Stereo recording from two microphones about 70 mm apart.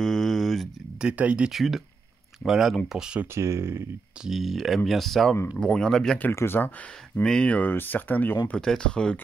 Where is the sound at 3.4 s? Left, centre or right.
Right.